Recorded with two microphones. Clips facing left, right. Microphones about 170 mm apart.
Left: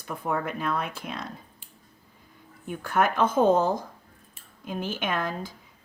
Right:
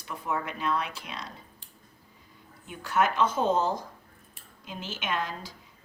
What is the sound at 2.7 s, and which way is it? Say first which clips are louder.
Speech: left 2 dB; 50° left (ahead or behind).